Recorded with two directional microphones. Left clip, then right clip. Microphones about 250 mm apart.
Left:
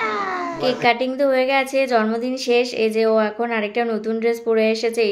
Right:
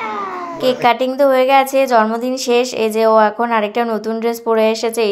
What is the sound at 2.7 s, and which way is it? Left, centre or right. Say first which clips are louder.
Speech: right 5 dB; centre.